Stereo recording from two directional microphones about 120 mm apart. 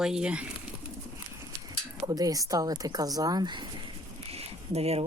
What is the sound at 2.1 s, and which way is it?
A woman's voice, 30° right (ahead or behind).